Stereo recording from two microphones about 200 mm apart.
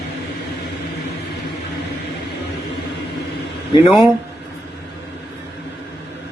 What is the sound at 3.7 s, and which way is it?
Speech, 25° left (ahead or behind).